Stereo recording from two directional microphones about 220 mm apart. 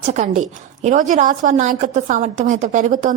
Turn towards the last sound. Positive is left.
turn(degrees=-35)  # may be behind; listen again after turning